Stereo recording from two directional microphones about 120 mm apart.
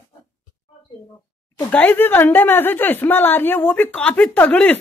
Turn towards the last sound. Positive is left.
turn(degrees=15)  # may be behind; listen again after turning